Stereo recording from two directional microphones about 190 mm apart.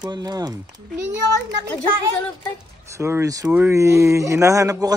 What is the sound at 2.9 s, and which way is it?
A man's voice, 15° right (ahead or behind).